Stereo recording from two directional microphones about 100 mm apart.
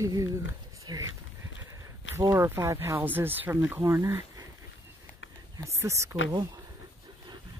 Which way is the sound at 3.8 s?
30° right (ahead or behind).